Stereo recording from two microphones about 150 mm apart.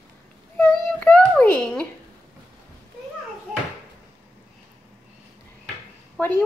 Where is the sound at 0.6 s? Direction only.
10° left (ahead or behind).